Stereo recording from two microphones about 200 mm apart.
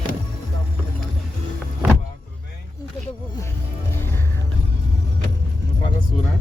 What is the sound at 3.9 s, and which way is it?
Music, 10° left (ahead or behind).